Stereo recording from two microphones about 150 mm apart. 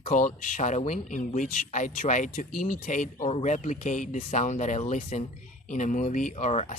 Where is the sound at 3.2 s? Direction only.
45° left (ahead or behind).